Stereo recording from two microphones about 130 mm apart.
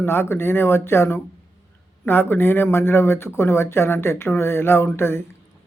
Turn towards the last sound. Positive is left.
turn(degrees=20)  # may be behind; listen again after turning